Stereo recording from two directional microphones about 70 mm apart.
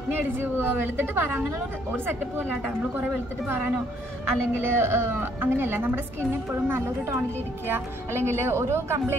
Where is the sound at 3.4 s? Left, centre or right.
Right.